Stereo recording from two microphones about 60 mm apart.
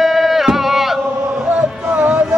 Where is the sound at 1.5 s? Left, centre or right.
Right.